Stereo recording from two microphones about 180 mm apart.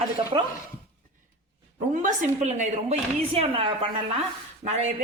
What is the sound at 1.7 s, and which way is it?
A woman's voice, 45° right (ahead or behind).